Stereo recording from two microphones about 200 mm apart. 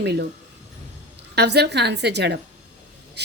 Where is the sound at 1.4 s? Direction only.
60° right (ahead or behind).